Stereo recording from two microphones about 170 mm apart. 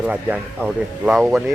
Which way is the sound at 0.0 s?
5° right (ahead or behind).